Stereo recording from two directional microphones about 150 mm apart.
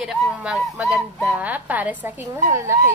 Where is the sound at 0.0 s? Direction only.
10° right (ahead or behind).